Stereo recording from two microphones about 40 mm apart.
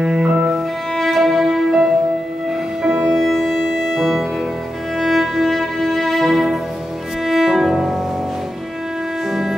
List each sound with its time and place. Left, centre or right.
0.0 s music: centre
0.9 s music: centre
2.9 s music: centre
9.3 s music: centre